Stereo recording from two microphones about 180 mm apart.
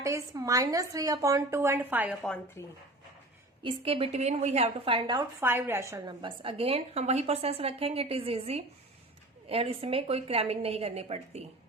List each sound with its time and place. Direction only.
0.0 s a woman's voice: 20° right (ahead or behind)
2.6 s speech: 15° left (ahead or behind)
3.6 s a woman's voice: 30° right (ahead or behind)
4.9 s speech: 25° right (ahead or behind)
5.5 s a woman's voice: 10° right (ahead or behind)
6.2 s a woman's voice: 30° right (ahead or behind)